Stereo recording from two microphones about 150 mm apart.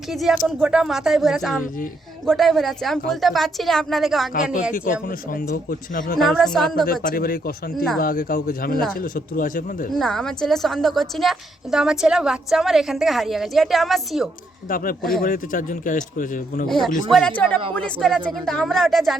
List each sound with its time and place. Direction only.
0.1 s a woman's voice: centre (ahead or behind)
4.7 s speech: 65° left (ahead or behind)
6.1 s a woman's voice: centre (ahead or behind)
6.8 s speech: 70° left (ahead or behind)
9.9 s a woman's voice: centre (ahead or behind)
15.2 s a man's voice: 70° left (ahead or behind)
16.6 s a woman's voice: centre (ahead or behind)